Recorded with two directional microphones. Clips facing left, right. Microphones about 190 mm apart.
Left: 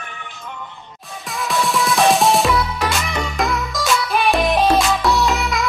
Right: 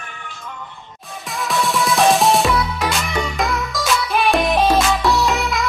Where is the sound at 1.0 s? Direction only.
Centre (ahead or behind).